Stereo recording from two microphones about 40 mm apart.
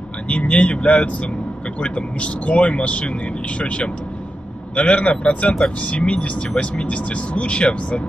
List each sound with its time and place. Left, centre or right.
0.3 s a man's voice: left